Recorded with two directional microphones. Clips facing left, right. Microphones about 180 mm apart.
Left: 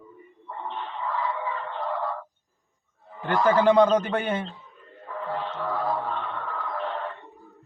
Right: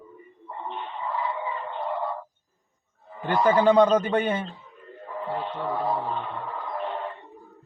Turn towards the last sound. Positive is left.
turn(degrees=-15)  # may be behind; listen again after turning